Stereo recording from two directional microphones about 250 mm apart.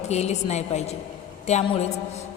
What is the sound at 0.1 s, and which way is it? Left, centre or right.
A woman's voice, left.